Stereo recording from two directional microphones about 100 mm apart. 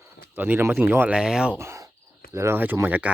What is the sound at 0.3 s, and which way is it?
Speech, 20° right (ahead or behind).